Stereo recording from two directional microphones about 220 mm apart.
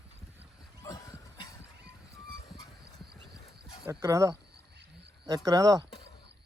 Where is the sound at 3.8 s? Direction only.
15° right (ahead or behind).